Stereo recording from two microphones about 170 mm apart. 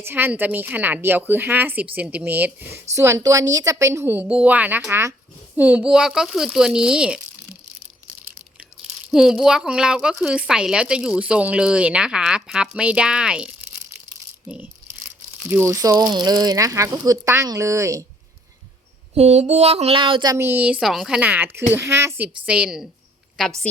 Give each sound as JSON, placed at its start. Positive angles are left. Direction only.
{"t": 0.0, "sound": "a woman's voice", "side_deg": -10}
{"t": 9.0, "sound": "speech", "side_deg": -5}
{"t": 19.1, "sound": "a woman's voice", "side_deg": -40}